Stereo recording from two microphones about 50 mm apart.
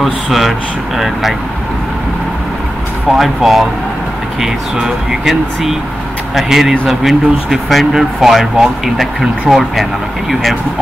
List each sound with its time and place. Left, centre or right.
0.0 s speech: centre
3.1 s speech: centre
4.7 s speech: centre